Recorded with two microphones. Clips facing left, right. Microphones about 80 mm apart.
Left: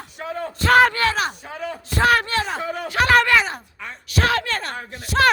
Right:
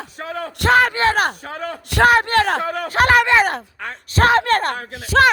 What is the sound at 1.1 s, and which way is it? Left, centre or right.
A man's voice, right.